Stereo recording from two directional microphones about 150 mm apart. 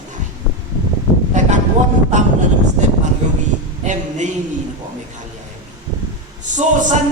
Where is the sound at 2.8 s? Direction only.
50° right (ahead or behind).